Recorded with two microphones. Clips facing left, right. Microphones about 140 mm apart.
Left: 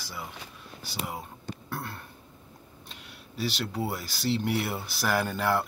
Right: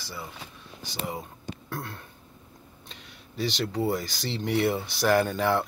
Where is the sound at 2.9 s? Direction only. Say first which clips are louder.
Even; 5° left (ahead or behind).